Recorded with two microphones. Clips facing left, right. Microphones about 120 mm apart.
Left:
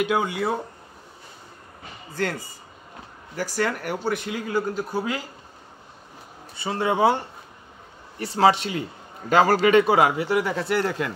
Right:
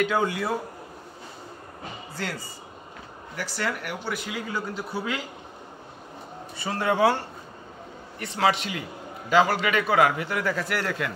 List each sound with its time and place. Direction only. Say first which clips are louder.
0.0 s a man's voice: left 1 dB; 20° left (ahead or behind)
3.6 s speech: left 3 dB; 35° left (ahead or behind)
6.6 s a man's voice: left 1 dB; 20° left (ahead or behind)
8.2 s speech: left 5 dB; 35° left (ahead or behind)
9.3 s a man's voice: left 4 dB; 45° left (ahead or behind); by 11.1 s 25° left (ahead or behind)